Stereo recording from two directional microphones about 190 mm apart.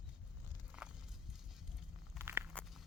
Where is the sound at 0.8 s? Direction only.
5° right (ahead or behind).